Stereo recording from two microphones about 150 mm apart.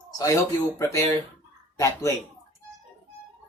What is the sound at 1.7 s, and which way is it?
Speech, 20° left (ahead or behind).